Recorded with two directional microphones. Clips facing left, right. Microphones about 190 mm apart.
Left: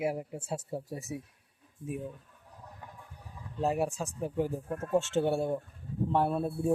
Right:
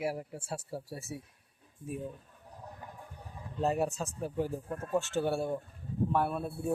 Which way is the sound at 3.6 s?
10° left (ahead or behind).